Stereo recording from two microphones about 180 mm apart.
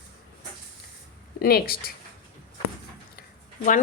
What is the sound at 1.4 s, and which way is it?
Speech, 55° left (ahead or behind).